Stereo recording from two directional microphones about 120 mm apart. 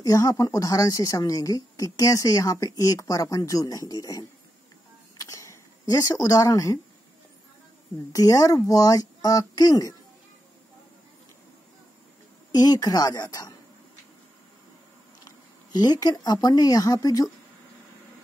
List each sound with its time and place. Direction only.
0.0 s speech: 30° left (ahead or behind)
5.1 s a sound: 30° left (ahead or behind)
6.2 s speech: 30° left (ahead or behind)
8.1 s speech: 30° left (ahead or behind)
12.5 s speech: 35° left (ahead or behind)
15.2 s speech: 35° left (ahead or behind)